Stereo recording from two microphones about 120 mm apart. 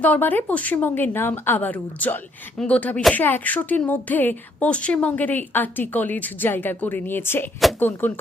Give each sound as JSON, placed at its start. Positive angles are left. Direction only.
{"t": 0.0, "sound": "a woman's voice", "side_deg": 15}